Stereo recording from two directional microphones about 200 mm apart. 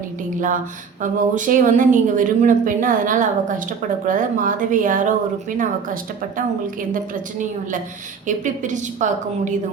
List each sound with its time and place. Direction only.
1.0 s a woman's voice: 40° right (ahead or behind)